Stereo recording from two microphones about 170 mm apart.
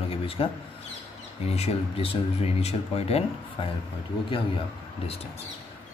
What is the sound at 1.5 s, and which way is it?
A man's voice, 40° left (ahead or behind).